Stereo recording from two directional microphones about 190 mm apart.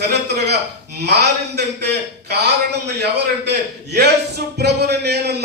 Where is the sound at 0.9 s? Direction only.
60° right (ahead or behind).